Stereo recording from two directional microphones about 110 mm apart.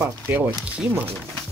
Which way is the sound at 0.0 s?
20° right (ahead or behind).